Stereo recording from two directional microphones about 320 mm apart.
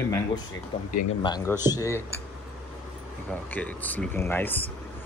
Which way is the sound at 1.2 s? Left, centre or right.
Centre.